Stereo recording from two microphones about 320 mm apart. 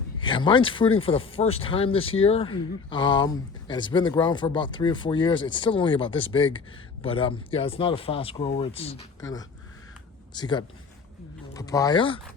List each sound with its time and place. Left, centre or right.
0.4 s speech: centre
10.3 s speech: centre